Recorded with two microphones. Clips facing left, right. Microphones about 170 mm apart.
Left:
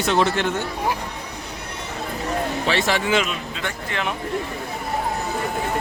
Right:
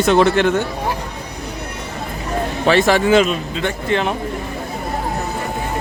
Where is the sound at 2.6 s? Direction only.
50° right (ahead or behind); by 4.1 s 30° right (ahead or behind).